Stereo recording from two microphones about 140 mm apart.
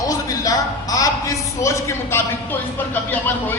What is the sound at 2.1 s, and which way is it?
Speech, 15° left (ahead or behind).